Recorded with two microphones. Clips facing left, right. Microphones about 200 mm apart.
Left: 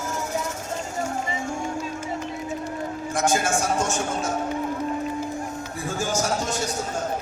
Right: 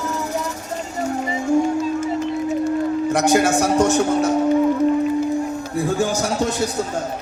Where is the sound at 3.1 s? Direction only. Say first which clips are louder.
Right 6 dB; 65° right (ahead or behind).